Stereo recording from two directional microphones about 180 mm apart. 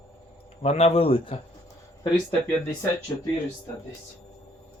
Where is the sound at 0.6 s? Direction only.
35° left (ahead or behind).